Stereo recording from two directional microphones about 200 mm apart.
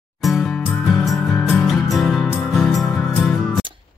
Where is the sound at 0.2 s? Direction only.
Centre (ahead or behind).